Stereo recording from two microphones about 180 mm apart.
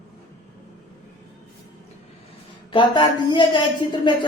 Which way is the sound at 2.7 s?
25° left (ahead or behind).